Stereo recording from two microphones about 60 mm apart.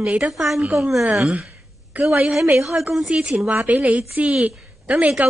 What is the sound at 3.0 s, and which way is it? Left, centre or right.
Speech, centre.